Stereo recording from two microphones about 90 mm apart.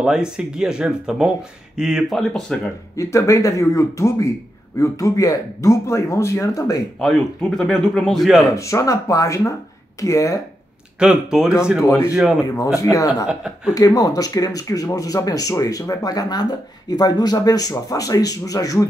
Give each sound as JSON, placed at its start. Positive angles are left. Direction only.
{"t": 0.0, "sound": "speech", "side_deg": -10}
{"t": 2.1, "sound": "speech", "side_deg": 5}
{"t": 3.0, "sound": "speech", "side_deg": 35}
{"t": 7.0, "sound": "speech", "side_deg": 5}
{"t": 8.5, "sound": "speech", "side_deg": 35}
{"t": 11.0, "sound": "speech", "side_deg": -10}
{"t": 11.8, "sound": "speech", "side_deg": 30}
{"t": 12.6, "sound": "speech", "side_deg": -5}
{"t": 12.9, "sound": "speech", "side_deg": 40}
{"t": 13.3, "sound": "speech", "side_deg": -10}
{"t": 13.7, "sound": "speech", "side_deg": 45}